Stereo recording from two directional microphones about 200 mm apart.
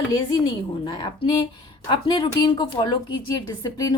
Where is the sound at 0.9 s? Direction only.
25° left (ahead or behind).